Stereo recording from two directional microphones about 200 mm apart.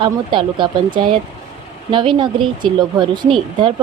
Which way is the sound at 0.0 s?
25° right (ahead or behind).